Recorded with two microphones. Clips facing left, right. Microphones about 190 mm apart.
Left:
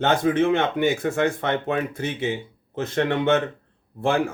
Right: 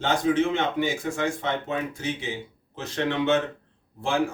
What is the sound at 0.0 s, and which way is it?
A man's voice, 55° left (ahead or behind).